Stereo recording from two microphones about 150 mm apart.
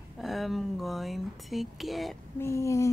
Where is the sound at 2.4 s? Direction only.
20° left (ahead or behind).